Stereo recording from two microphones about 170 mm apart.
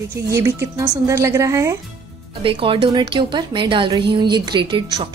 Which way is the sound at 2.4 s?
30° right (ahead or behind).